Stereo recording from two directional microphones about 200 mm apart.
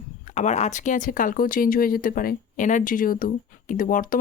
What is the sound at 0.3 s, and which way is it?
Speech, 35° left (ahead or behind).